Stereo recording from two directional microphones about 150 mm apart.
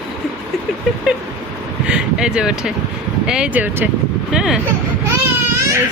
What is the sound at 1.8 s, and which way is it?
Speech, 5° right (ahead or behind).